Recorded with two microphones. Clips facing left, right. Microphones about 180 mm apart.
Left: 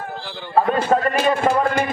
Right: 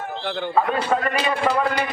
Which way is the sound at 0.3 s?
55° right (ahead or behind).